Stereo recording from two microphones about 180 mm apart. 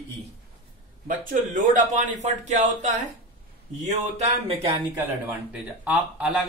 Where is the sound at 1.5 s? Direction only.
45° right (ahead or behind).